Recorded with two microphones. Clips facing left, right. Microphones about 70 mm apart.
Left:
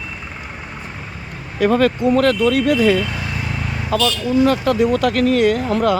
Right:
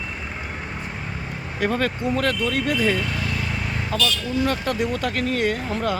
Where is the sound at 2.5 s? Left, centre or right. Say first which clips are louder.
Left 7 dB; left.